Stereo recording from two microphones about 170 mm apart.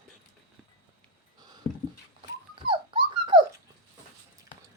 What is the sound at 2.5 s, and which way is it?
Dog, 30° right (ahead or behind).